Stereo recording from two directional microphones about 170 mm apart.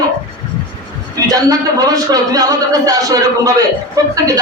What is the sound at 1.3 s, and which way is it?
A woman's voice, 20° right (ahead or behind).